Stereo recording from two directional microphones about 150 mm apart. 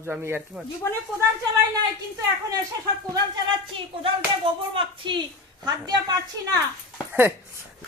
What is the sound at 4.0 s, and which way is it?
A woman's voice, 35° right (ahead or behind).